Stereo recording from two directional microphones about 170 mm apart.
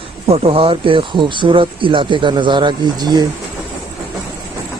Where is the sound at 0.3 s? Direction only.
35° right (ahead or behind).